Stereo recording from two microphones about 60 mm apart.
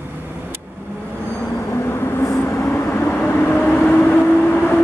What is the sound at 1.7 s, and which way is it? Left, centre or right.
Vehicle, left.